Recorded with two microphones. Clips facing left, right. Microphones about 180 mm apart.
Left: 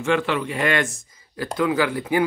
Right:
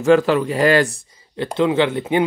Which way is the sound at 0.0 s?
40° right (ahead or behind).